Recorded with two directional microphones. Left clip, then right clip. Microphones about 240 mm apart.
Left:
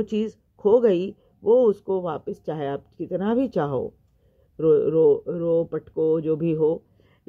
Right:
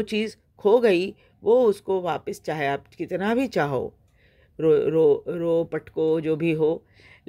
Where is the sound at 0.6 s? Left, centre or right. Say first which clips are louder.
Even; right.